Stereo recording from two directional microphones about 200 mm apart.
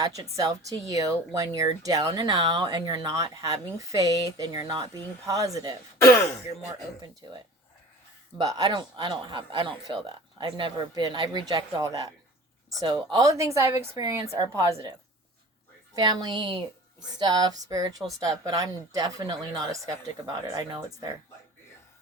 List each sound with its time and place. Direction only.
0.0 s speech: 20° right (ahead or behind)
6.0 s throat clearing: 15° left (ahead or behind)
8.4 s speech: 20° right (ahead or behind)
16.0 s speech: 20° right (ahead or behind)